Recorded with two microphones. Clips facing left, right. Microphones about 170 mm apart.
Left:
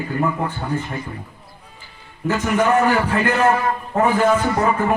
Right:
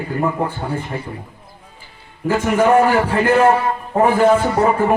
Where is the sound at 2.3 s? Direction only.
30° right (ahead or behind).